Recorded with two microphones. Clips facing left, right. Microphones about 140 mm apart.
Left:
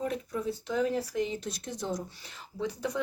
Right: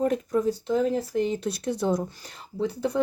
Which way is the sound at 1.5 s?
65° right (ahead or behind).